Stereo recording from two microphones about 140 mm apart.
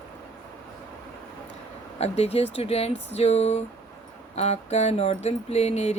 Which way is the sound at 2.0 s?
45° left (ahead or behind).